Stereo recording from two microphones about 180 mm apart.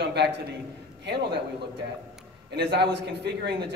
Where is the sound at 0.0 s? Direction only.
70° right (ahead or behind).